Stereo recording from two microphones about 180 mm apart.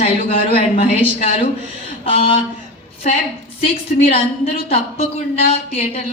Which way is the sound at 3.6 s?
35° left (ahead or behind).